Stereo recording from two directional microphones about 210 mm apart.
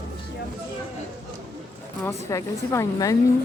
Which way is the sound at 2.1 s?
15° left (ahead or behind).